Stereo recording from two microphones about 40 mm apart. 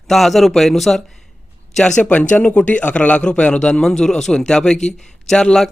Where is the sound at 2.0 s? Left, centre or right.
Left.